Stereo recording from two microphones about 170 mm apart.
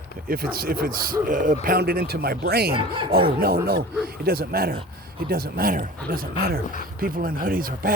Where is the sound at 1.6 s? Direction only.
65° right (ahead or behind).